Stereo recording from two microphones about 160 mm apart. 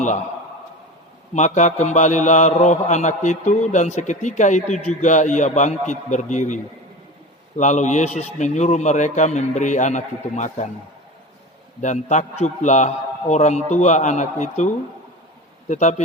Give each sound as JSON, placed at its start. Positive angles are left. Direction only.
{"t": 1.3, "sound": "a man's voice", "side_deg": 50}
{"t": 11.8, "sound": "a man's voice", "side_deg": 50}
{"t": 15.7, "sound": "a man's voice", "side_deg": 45}